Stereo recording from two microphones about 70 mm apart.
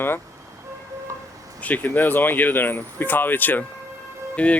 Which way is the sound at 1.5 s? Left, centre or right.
Left.